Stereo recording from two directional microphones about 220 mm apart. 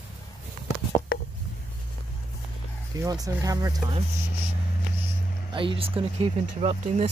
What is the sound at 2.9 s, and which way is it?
Speech, 15° right (ahead or behind).